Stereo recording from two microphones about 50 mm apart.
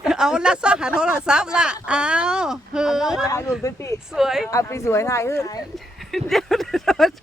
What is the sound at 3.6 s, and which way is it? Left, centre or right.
Speech, left.